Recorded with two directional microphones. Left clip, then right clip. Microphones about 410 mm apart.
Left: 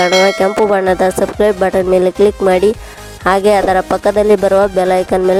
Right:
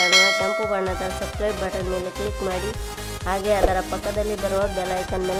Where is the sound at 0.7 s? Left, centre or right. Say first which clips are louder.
Left 13 dB; left.